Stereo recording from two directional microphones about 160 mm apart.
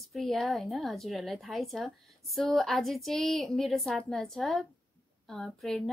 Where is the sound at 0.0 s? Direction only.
Centre (ahead or behind).